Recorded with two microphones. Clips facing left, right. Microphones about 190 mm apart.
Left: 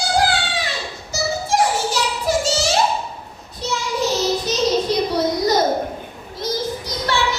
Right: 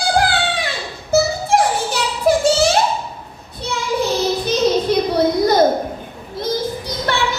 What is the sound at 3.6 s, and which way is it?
Child singing, 55° right (ahead or behind).